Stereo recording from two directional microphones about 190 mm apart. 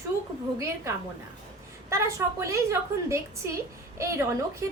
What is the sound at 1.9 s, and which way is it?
A woman's voice, 15° right (ahead or behind).